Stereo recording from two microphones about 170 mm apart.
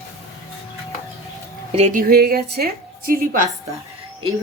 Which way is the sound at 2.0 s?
60° right (ahead or behind).